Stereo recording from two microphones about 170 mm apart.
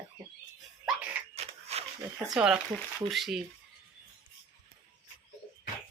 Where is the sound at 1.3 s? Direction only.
40° right (ahead or behind).